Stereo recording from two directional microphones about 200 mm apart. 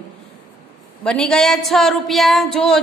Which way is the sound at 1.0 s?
5° left (ahead or behind).